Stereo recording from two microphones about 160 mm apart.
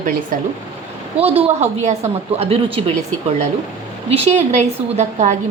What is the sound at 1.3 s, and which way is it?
A woman's voice, 40° right (ahead or behind).